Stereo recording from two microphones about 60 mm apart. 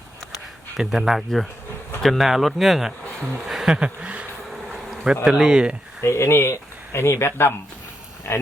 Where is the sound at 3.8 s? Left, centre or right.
Centre.